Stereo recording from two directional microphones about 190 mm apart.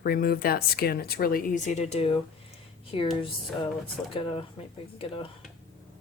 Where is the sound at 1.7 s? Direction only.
35° left (ahead or behind).